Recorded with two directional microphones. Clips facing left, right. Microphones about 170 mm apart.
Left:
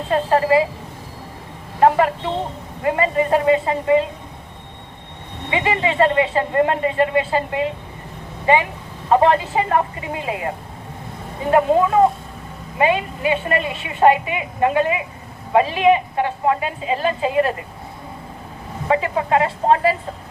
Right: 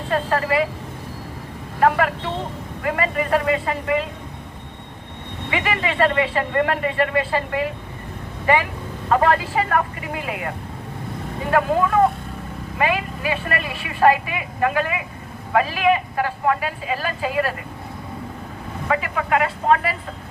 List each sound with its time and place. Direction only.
0.1 s a woman's voice: 25° left (ahead or behind)
1.8 s a woman's voice: 25° left (ahead or behind)
5.5 s a woman's voice: 25° left (ahead or behind)
11.5 s a woman's voice: 25° left (ahead or behind)
18.9 s a woman's voice: 30° left (ahead or behind)